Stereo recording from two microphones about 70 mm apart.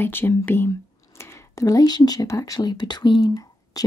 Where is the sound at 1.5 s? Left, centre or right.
Left.